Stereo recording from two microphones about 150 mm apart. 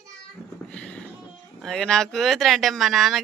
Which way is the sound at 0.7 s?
5° left (ahead or behind).